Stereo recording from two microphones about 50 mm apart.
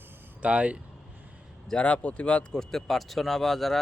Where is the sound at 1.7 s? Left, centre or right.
Left.